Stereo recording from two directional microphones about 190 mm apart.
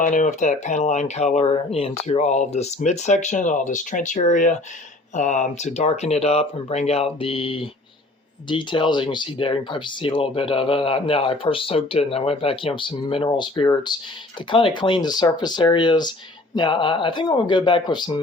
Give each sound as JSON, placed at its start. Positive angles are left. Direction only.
{"t": 0.0, "sound": "speech", "side_deg": 40}